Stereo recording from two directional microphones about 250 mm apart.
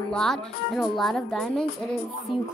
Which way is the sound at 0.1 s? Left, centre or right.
Centre.